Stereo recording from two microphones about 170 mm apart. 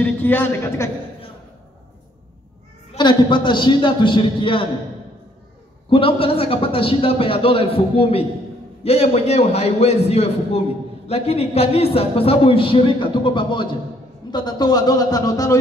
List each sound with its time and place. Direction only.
0.0 s a man's voice: 10° left (ahead or behind)
3.0 s a man's voice: 25° left (ahead or behind)
5.9 s a man's voice: 30° left (ahead or behind)